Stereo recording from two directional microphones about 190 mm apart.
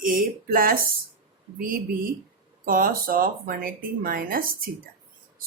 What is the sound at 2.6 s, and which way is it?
A woman's voice, 50° right (ahead or behind).